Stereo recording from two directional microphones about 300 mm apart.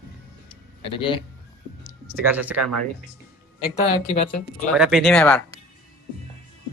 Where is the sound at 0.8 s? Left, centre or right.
Centre.